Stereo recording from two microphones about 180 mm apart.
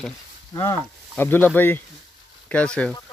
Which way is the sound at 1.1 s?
10° left (ahead or behind).